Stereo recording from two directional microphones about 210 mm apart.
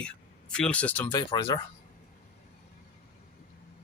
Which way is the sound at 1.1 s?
20° left (ahead or behind).